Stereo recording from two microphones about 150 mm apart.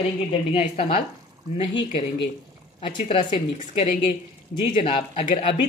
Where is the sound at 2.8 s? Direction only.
35° left (ahead or behind).